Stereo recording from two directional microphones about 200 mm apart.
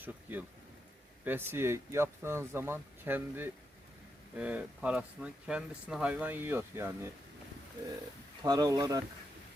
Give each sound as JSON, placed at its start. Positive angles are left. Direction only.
{"t": 0.0, "sound": "speech", "side_deg": -10}
{"t": 8.4, "sound": "speech", "side_deg": -20}